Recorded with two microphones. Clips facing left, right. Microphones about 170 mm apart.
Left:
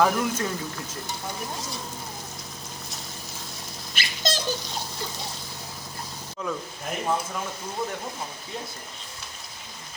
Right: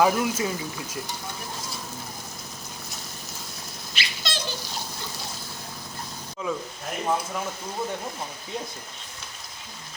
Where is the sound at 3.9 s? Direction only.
45° left (ahead or behind).